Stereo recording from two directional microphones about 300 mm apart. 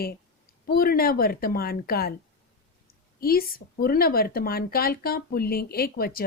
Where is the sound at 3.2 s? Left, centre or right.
Left.